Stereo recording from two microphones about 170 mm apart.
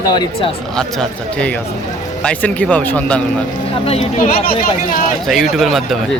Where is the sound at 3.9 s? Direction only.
45° left (ahead or behind).